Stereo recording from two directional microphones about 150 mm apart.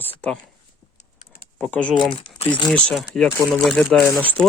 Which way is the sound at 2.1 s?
35° left (ahead or behind).